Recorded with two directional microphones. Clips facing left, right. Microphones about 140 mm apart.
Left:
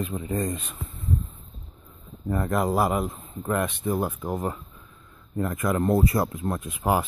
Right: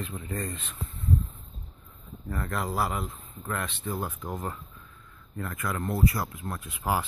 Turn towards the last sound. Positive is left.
turn(degrees=20)  # may be behind; listen again after turning